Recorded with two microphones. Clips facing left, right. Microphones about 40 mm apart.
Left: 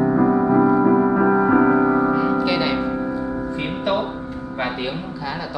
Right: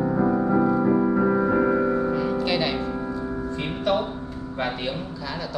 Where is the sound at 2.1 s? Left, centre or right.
Centre.